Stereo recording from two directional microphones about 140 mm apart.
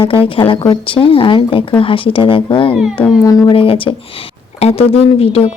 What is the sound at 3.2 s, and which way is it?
Speech, 25° left (ahead or behind).